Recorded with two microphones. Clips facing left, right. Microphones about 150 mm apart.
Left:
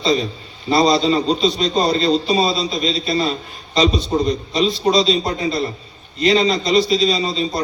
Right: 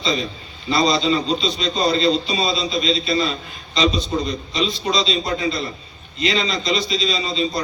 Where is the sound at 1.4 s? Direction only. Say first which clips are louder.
Left 4 dB; 45° left (ahead or behind).